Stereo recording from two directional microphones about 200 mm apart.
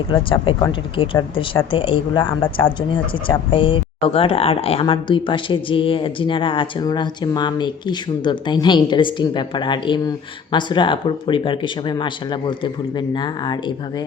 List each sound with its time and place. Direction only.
0.1 s speech: 25° left (ahead or behind)